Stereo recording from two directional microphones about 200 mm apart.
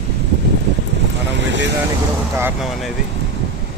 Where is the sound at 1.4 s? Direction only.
65° right (ahead or behind).